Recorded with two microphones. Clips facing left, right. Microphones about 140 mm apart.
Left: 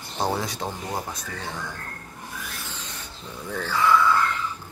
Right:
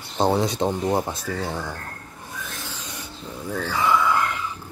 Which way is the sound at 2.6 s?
15° right (ahead or behind).